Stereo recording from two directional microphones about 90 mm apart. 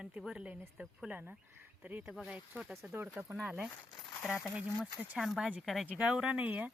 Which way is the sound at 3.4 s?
15° right (ahead or behind).